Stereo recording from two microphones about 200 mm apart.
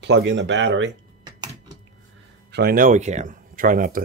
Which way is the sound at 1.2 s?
20° right (ahead or behind).